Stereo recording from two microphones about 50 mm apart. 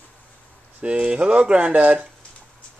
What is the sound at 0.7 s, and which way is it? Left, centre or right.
Speech, right.